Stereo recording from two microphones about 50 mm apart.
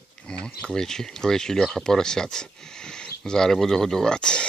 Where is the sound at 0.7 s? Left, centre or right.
Centre.